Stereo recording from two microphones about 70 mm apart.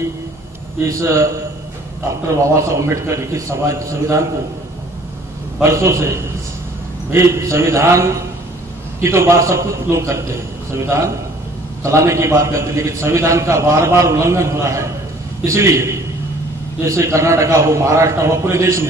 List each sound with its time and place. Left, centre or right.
0.8 s a man's voice: right
5.6 s a man's voice: right
11.8 s a man's voice: right